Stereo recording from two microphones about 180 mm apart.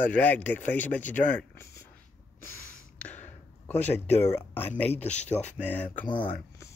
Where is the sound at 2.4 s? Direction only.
10° left (ahead or behind).